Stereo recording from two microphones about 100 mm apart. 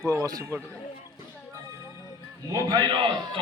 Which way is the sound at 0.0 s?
35° right (ahead or behind).